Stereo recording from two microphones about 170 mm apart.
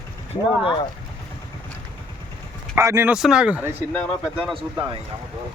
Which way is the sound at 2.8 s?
15° right (ahead or behind).